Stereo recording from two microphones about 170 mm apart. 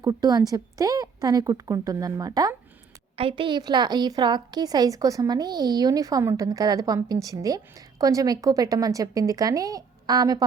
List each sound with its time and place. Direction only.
0.0 s a woman's voice: 20° right (ahead or behind)